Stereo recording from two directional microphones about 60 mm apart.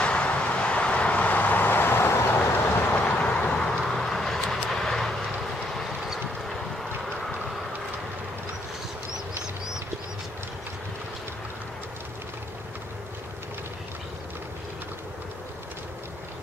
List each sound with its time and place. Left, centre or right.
0.0 s vehicle: centre
3.3 s vehicle: centre